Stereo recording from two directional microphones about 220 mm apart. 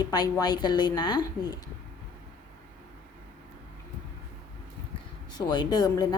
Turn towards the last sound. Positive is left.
turn(degrees=20)  # may be behind; listen again after turning